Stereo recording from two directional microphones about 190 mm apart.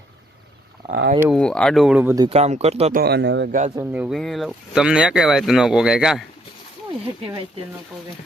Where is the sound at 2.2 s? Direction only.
35° right (ahead or behind).